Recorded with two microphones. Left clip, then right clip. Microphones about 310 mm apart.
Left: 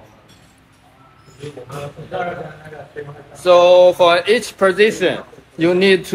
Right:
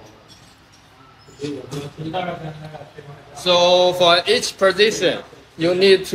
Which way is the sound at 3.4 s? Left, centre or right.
Centre.